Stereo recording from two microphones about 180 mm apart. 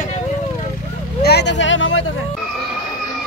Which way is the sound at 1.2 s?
70° left (ahead or behind).